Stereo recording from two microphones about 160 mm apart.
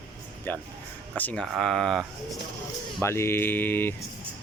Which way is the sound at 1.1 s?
10° left (ahead or behind).